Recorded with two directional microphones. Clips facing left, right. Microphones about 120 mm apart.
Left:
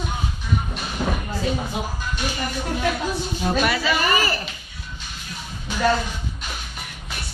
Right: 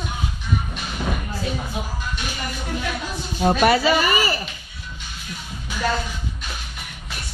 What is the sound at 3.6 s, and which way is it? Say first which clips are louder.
Speech: right 9 dB; 40° right (ahead or behind).